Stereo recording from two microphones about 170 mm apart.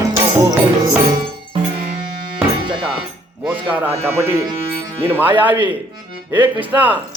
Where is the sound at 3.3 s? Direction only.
10° right (ahead or behind).